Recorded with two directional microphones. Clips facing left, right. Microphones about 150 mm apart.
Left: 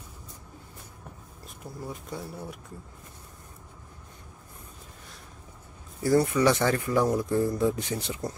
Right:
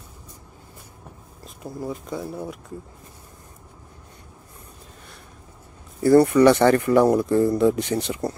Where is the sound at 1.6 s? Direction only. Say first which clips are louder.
Right 8 dB; 90° right.